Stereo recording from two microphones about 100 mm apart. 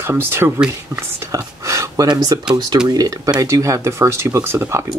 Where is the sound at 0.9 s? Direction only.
30° right (ahead or behind).